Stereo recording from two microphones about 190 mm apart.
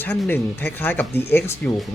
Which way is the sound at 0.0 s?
10° left (ahead or behind).